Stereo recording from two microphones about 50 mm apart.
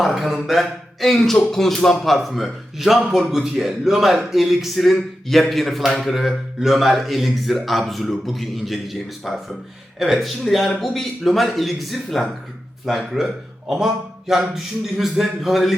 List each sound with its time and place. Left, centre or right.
0.0 s a man's voice: centre